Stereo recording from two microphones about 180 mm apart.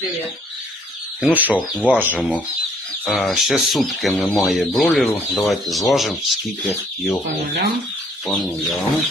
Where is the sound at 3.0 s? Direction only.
Centre (ahead or behind).